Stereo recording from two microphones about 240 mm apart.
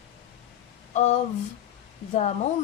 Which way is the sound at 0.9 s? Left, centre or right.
Left.